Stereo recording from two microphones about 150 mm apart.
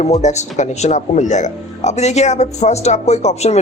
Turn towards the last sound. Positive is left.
turn(degrees=45)  # may be behind; listen again after turning